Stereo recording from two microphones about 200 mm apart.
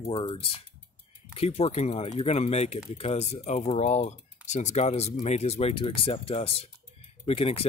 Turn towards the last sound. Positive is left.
turn(degrees=30)  # may be behind; listen again after turning